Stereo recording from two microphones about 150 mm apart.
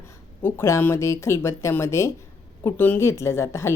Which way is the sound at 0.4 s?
15° left (ahead or behind).